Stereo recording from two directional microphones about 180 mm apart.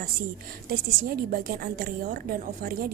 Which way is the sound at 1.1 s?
55° right (ahead or behind).